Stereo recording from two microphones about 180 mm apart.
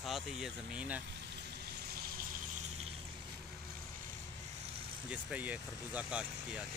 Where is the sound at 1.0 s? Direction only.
65° right (ahead or behind).